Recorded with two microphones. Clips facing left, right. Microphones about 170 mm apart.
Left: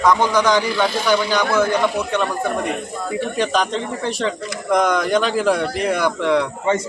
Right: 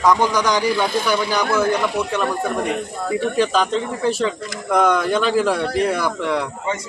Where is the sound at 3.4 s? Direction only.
5° right (ahead or behind).